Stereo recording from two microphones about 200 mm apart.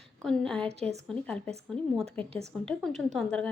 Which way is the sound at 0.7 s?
30° right (ahead or behind).